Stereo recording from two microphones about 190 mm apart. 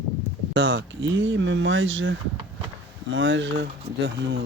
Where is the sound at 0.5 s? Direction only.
75° right (ahead or behind).